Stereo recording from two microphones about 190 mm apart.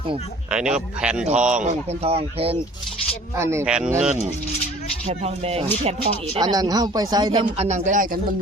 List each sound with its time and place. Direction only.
0.5 s a man's voice: 5° right (ahead or behind)
1.6 s speech: 35° right (ahead or behind)
3.3 s speech: 15° right (ahead or behind)
5.0 s speech: 35° right (ahead or behind)
6.4 s speech: 20° right (ahead or behind)
7.5 s speech: 35° right (ahead or behind)